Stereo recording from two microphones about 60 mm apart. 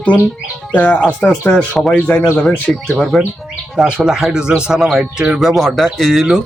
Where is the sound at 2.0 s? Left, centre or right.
Left.